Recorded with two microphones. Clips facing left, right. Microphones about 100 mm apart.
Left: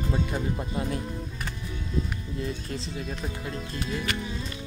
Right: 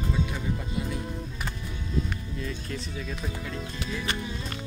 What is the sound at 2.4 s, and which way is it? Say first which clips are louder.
Speech: left 3 dB; 35° left (ahead or behind).